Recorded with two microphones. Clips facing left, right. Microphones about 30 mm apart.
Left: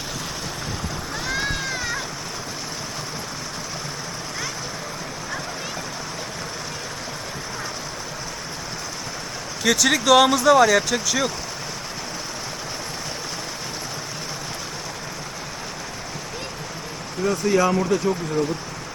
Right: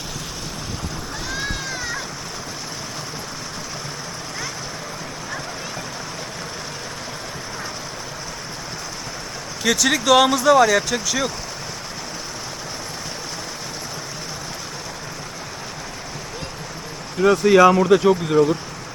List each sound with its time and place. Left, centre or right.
1.3 s a sound: centre
9.6 s speech: centre
17.2 s speech: right
17.8 s speech: right